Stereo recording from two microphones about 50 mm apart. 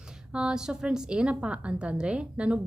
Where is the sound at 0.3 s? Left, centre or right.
Centre.